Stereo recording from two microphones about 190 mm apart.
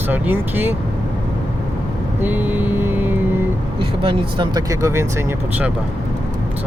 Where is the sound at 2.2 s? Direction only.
10° right (ahead or behind).